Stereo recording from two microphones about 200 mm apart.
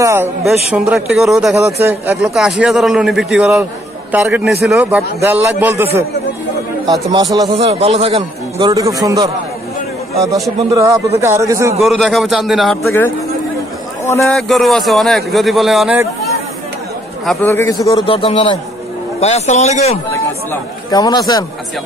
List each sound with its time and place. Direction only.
0.0 s a sound: 10° right (ahead or behind)
0.7 s a man's voice: 5° right (ahead or behind)
6.9 s a man's voice: 20° right (ahead or behind)
7.5 s a man's voice: 30° right (ahead or behind)
8.7 s a man's voice: 15° right (ahead or behind)
10.7 s a man's voice: 15° right (ahead or behind)
11.8 s a man's voice: centre (ahead or behind)
14.2 s a man's voice: centre (ahead or behind)
17.3 s a man's voice: 10° left (ahead or behind); by 20.0 s 35° left (ahead or behind)
20.9 s a man's voice: 20° left (ahead or behind)